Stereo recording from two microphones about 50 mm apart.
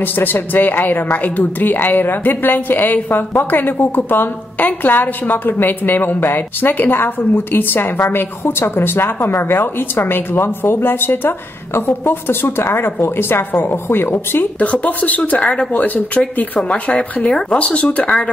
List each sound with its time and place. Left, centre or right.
0.0 s a woman's voice: left
14.6 s a woman's voice: left
15.3 s speech: centre
15.7 s a woman's voice: left